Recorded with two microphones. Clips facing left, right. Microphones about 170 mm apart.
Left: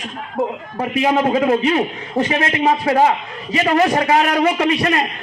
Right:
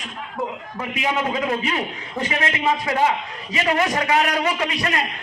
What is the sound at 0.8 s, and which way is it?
A man's voice, 35° left (ahead or behind).